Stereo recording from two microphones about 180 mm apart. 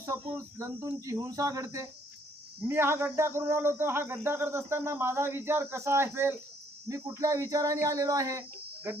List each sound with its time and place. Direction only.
0.0 s speech: 15° right (ahead or behind)